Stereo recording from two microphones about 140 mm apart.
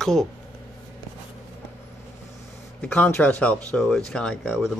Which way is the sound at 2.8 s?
10° left (ahead or behind).